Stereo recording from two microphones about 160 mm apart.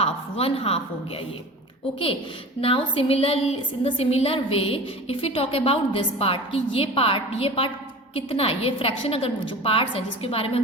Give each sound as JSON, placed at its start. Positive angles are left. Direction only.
{"t": 0.0, "sound": "a woman's voice", "side_deg": 35}
{"t": 2.6, "sound": "a woman's voice", "side_deg": 35}